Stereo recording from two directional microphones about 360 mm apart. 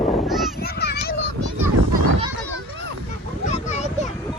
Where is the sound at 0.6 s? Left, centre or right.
Left.